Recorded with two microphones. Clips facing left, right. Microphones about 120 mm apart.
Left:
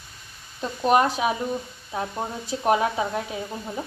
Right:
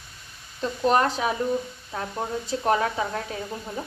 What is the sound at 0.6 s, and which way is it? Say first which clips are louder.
Speech: left 1 dB; 10° left (ahead or behind).